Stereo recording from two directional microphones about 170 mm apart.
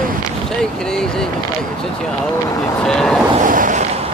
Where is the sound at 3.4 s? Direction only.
50° right (ahead or behind).